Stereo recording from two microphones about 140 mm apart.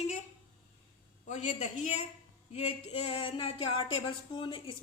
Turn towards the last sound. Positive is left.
turn(degrees=40)  # may be behind; listen again after turning